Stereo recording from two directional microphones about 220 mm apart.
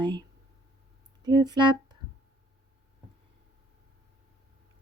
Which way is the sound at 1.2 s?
20° right (ahead or behind).